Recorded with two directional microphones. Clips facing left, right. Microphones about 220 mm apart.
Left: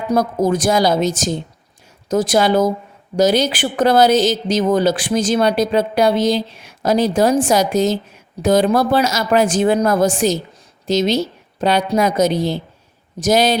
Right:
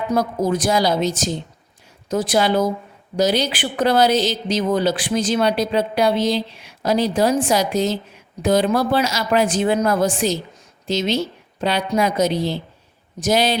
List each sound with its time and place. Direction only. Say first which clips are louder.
0.1 s a woman's voice: left 4 dB; 45° left (ahead or behind)